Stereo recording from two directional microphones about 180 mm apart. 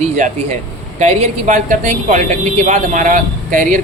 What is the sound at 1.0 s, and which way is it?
Speech, 40° right (ahead or behind).